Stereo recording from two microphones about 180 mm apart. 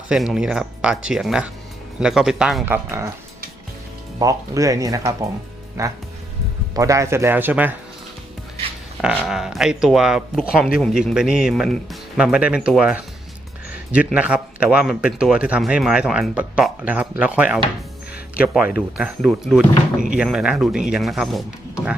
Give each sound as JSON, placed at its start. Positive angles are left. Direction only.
{"t": 0.1, "sound": "speech", "side_deg": -5}
{"t": 2.7, "sound": "speech", "side_deg": -15}
{"t": 4.2, "sound": "speech", "side_deg": -20}
{"t": 9.0, "sound": "speech", "side_deg": -5}